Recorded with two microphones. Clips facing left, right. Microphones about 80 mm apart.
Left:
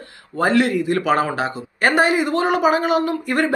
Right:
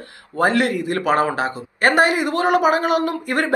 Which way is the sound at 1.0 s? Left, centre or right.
Right.